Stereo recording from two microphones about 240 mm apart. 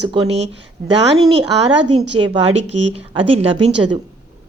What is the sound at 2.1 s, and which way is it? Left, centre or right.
A woman's voice, right.